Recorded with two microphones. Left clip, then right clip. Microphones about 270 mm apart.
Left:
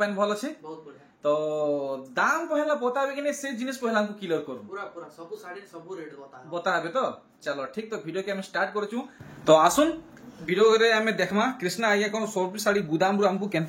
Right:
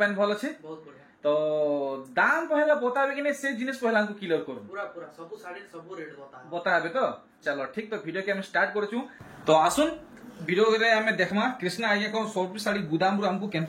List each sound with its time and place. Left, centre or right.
0.0 s a man's voice: centre
6.5 s speech: centre
9.5 s a man's voice: centre